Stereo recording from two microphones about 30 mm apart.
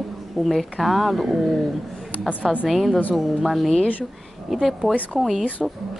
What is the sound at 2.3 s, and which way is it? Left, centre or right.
Speech, right.